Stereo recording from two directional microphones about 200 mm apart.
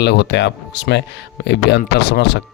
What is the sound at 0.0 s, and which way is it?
Speech, 60° left (ahead or behind).